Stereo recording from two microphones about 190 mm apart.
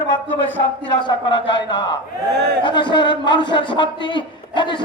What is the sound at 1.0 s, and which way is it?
A man's voice, 25° left (ahead or behind).